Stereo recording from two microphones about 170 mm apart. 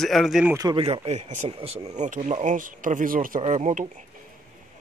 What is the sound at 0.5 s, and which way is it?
Speech, 20° right (ahead or behind).